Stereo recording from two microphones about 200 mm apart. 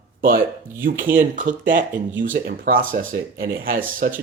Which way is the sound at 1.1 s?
40° right (ahead or behind).